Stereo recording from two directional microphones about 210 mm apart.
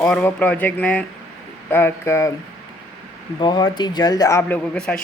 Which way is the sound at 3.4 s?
20° left (ahead or behind).